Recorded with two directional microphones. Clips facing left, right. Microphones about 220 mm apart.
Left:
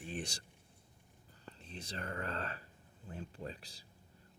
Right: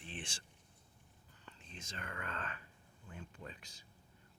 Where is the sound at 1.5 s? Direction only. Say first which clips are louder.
Left 5 dB; 35° left (ahead or behind).